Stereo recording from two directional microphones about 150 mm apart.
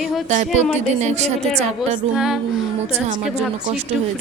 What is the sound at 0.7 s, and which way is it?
Speech, 50° right (ahead or behind).